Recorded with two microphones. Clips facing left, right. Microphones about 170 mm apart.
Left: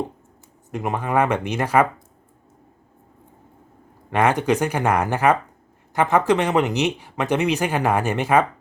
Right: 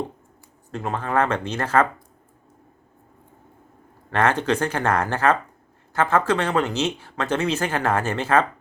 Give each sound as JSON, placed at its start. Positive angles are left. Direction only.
{"t": 0.7, "sound": "speech", "side_deg": 15}
{"t": 4.1, "sound": "speech", "side_deg": 15}